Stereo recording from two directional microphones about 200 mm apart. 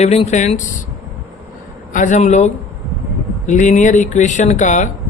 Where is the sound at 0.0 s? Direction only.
35° left (ahead or behind).